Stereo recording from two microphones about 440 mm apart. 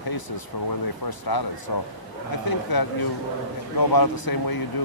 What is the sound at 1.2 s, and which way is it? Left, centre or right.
Speech, left.